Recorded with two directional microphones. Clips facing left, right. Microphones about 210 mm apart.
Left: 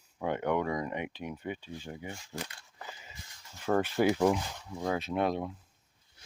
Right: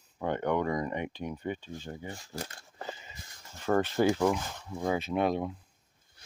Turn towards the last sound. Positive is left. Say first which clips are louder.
# right 2 dB
turn(degrees=0)  # may be behind; listen again after turning